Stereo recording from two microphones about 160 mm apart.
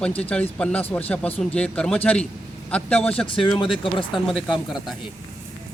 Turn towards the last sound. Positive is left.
turn(degrees=0)  # may be behind; listen again after turning